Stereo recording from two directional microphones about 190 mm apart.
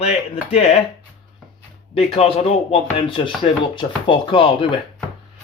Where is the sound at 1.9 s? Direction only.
30° left (ahead or behind).